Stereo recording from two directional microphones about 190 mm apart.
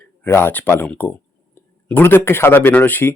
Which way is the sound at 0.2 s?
10° left (ahead or behind).